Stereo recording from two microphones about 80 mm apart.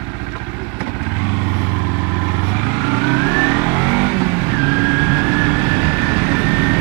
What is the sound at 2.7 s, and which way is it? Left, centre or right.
Vehicle, right.